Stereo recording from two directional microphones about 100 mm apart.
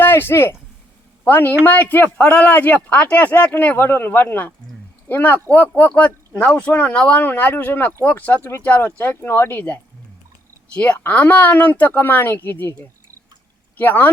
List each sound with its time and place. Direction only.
0.0 s speech: 20° left (ahead or behind)
13.7 s speech: 20° left (ahead or behind)